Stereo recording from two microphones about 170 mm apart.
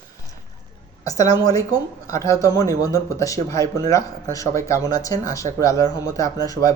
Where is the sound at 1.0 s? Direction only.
20° left (ahead or behind).